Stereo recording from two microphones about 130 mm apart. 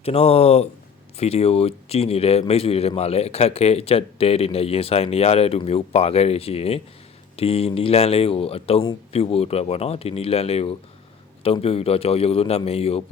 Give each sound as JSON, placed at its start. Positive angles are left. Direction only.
{"t": 0.0, "sound": "a man's voice", "side_deg": 50}